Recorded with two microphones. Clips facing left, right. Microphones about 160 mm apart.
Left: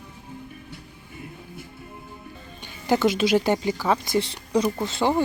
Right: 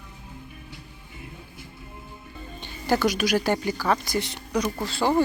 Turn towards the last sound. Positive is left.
turn(degrees=20)  # may be behind; listen again after turning